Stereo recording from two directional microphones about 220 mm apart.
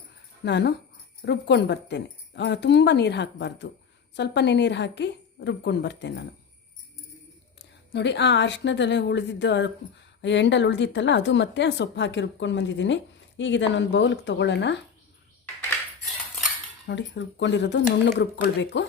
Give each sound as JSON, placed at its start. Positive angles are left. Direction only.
{"t": 0.4, "sound": "speech", "side_deg": 50}
{"t": 7.9, "sound": "speech", "side_deg": 50}
{"t": 16.8, "sound": "speech", "side_deg": 55}